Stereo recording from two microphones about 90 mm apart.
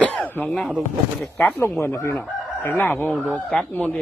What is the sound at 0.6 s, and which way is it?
Speech, centre (ahead or behind).